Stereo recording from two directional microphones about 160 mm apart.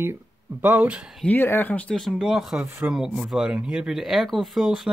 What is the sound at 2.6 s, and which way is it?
Speech, 15° right (ahead or behind).